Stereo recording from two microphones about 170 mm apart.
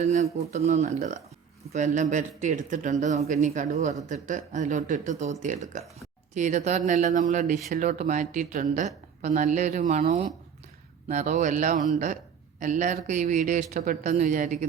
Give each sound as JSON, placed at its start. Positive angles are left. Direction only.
{"t": 0.0, "sound": "speech", "side_deg": -40}